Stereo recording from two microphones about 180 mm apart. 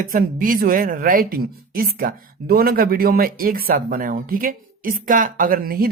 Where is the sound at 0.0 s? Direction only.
50° right (ahead or behind).